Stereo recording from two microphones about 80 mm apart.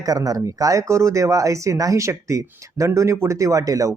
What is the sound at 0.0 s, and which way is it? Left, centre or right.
Speech, right.